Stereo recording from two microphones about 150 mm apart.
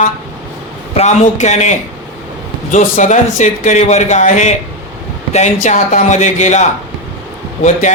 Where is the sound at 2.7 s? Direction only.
55° left (ahead or behind).